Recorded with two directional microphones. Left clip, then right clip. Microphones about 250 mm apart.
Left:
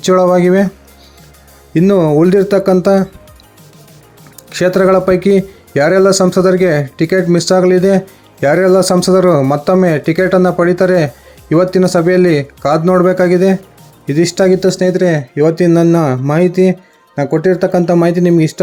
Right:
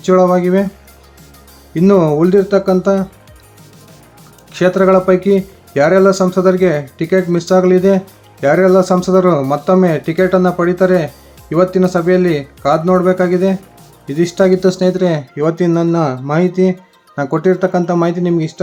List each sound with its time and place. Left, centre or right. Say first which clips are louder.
0.0 s speech: left 2 dB; left
1.7 s speech: left 1 dB; centre
4.5 s speech: left 1 dB; left